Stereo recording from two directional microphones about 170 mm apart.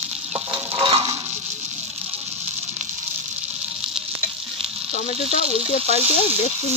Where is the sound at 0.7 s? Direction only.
30° right (ahead or behind).